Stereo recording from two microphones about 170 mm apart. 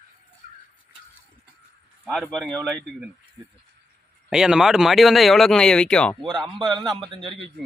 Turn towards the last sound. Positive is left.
turn(degrees=-30)  # may be behind; listen again after turning